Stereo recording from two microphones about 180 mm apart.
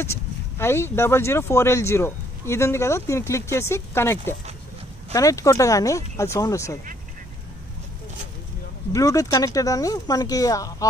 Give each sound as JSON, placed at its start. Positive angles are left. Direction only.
{"t": 0.0, "sound": "speech", "side_deg": 15}
{"t": 8.9, "sound": "speech", "side_deg": 20}